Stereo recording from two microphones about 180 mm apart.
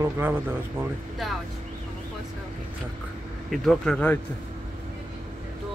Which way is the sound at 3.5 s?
Centre (ahead or behind).